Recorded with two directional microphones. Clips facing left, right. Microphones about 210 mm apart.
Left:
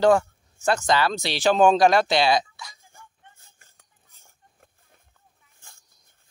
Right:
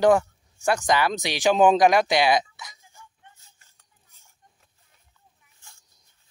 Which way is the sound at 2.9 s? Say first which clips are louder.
Even; 55° left (ahead or behind).